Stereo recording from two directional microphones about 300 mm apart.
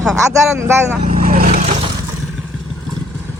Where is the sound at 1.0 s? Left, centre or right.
Right.